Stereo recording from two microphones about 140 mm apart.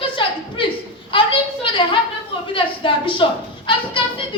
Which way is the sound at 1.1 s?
40° left (ahead or behind).